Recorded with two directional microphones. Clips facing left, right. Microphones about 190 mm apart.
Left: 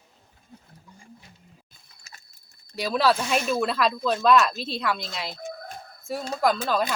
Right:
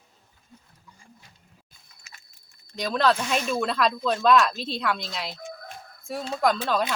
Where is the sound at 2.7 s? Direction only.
5° left (ahead or behind).